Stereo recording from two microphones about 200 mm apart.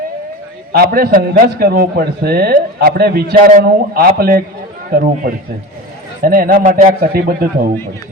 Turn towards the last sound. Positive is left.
turn(degrees=-50)  # may be behind; listen again after turning